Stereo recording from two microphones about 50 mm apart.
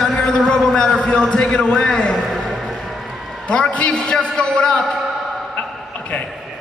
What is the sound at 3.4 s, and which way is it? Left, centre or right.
A man's voice, left.